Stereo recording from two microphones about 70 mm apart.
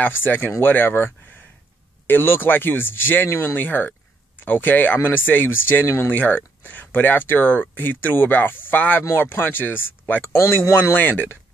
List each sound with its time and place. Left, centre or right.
0.0 s speech: left
10.3 s speech: left